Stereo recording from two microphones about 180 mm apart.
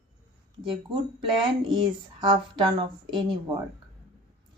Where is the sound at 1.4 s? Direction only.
25° right (ahead or behind).